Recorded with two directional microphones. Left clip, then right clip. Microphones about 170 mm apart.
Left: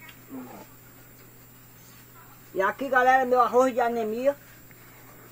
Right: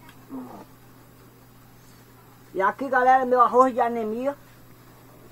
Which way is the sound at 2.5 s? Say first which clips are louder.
Right 1 dB; 10° right (ahead or behind).